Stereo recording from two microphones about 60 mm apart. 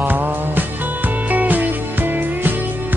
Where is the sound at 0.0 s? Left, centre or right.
Right.